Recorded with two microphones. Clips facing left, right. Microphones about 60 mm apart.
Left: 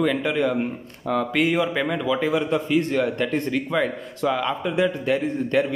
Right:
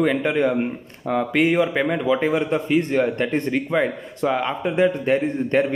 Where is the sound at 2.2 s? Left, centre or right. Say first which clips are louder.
Right 1 dB; right.